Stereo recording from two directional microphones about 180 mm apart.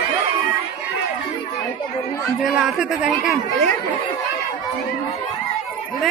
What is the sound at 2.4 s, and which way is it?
Speech, 5° right (ahead or behind).